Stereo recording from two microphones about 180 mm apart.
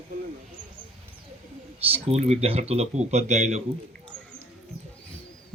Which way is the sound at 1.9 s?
30° right (ahead or behind).